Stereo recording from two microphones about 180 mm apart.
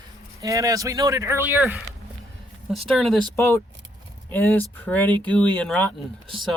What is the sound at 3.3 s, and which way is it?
Speech, 15° left (ahead or behind).